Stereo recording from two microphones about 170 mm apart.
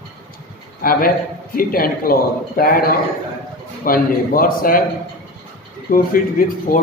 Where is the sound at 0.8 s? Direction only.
55° left (ahead or behind).